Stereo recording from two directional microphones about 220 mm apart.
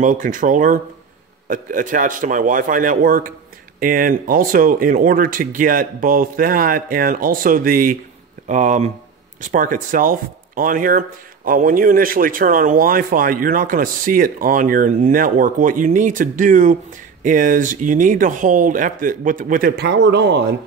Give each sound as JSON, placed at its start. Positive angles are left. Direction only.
{"t": 0.0, "sound": "speech", "side_deg": -35}